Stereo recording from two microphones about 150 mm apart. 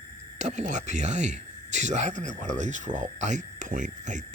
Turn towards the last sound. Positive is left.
turn(degrees=-55)  # may be behind; listen again after turning